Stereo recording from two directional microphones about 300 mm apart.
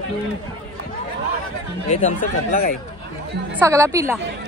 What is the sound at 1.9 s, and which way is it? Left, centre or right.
Speech, left.